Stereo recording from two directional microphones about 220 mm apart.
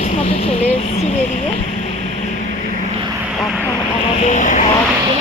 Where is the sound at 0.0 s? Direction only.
35° left (ahead or behind).